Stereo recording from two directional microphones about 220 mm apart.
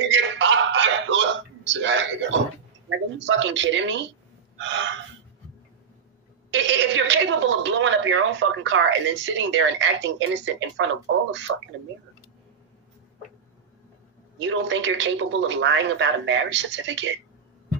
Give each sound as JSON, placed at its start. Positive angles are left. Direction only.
{"t": 0.0, "sound": "a sound", "side_deg": -55}
{"t": 3.2, "sound": "a woman's voice", "side_deg": -55}
{"t": 6.5, "sound": "a woman's voice", "side_deg": -55}
{"t": 14.4, "sound": "a woman's voice", "side_deg": -55}